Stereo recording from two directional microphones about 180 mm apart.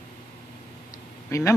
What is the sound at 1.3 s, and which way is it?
Speech, 15° left (ahead or behind).